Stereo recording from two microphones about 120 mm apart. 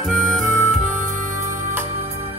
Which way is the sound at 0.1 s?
5° left (ahead or behind).